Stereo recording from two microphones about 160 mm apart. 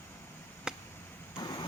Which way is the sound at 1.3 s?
25° left (ahead or behind).